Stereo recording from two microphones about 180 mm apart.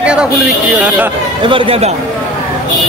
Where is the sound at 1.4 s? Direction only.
30° right (ahead or behind).